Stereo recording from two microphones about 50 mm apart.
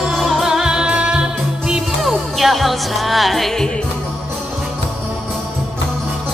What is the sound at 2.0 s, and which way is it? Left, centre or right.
Music, centre.